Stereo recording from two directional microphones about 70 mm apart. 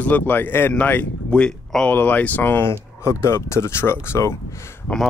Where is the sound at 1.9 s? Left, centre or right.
Left.